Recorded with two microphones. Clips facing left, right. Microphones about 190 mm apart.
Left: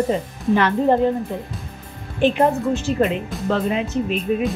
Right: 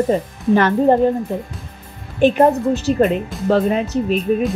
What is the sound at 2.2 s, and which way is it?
Speech, 45° right (ahead or behind).